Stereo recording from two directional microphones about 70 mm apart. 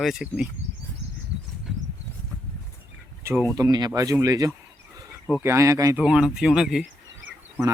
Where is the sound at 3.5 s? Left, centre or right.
Right.